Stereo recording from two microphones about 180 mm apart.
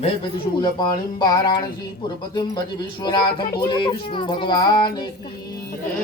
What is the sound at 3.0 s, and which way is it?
Speech, 25° left (ahead or behind).